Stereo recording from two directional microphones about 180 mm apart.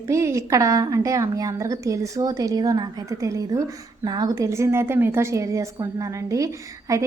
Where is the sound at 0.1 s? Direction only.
15° right (ahead or behind).